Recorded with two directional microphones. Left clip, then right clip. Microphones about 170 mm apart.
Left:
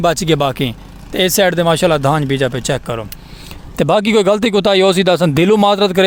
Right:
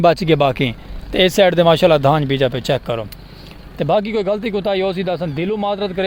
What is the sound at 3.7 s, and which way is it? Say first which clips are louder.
Speech: left 5 dB; 55° left (ahead or behind).